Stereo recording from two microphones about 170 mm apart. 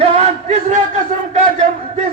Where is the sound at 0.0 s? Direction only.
35° right (ahead or behind).